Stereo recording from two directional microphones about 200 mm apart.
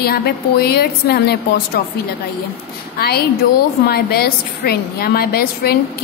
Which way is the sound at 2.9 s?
50° left (ahead or behind).